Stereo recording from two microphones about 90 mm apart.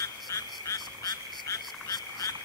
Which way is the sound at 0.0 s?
35° left (ahead or behind).